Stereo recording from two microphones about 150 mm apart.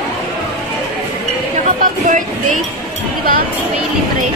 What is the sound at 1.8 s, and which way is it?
Speech, 55° right (ahead or behind).